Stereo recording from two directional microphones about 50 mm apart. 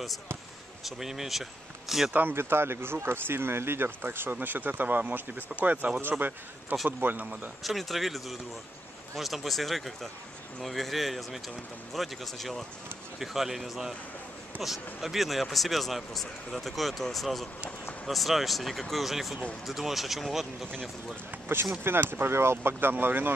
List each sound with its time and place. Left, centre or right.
0.8 s speech: centre
2.1 s speech: right
7.6 s speech: centre
21.8 s speech: right